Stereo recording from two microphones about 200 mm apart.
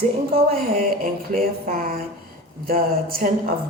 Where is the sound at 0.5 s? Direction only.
45° right (ahead or behind).